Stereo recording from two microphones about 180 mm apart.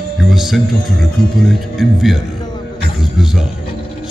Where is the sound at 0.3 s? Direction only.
Centre (ahead or behind).